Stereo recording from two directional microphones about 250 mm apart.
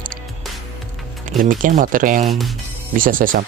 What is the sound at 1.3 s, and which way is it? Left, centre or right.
Speech, right.